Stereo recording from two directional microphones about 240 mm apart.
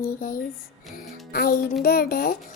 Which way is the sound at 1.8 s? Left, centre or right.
Left.